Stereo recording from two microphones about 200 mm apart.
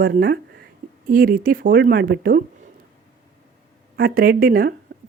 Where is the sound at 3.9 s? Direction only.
45° right (ahead or behind).